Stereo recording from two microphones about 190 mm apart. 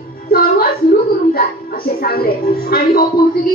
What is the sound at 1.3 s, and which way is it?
A woman's voice, 50° left (ahead or behind).